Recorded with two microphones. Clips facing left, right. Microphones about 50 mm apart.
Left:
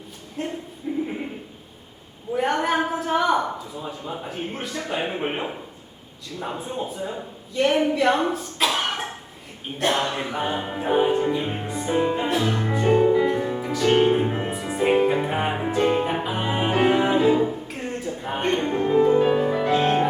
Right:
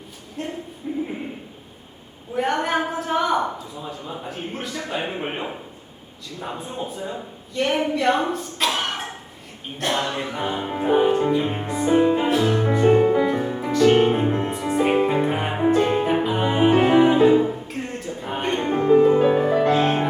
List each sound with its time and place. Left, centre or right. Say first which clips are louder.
0.4 s a man's voice: left 1 dB; centre
0.8 s a sound: left 1 dB; centre
2.3 s a sound: even; centre
3.8 s a man's voice: left 1 dB; centre
10.7 s a man's voice: right 3 dB; centre
11.3 s music: right 3 dB; centre
14.1 s music: even; centre
14.3 s music: right 4 dB; centre
18.9 s music: right 1 dB; centre
19.7 s music: right 1 dB; centre